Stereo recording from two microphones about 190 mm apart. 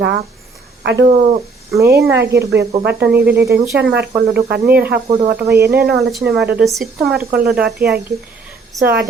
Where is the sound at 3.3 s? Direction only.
15° right (ahead or behind).